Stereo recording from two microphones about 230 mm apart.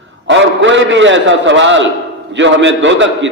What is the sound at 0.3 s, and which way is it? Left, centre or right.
A man's voice, right.